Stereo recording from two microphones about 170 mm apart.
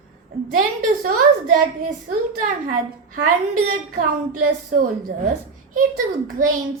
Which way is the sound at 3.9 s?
55° right (ahead or behind).